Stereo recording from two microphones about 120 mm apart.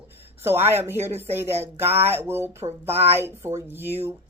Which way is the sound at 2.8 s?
55° right (ahead or behind).